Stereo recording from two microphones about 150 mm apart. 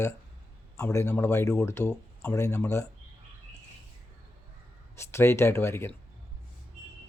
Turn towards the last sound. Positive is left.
turn(degrees=15)  # may be behind; listen again after turning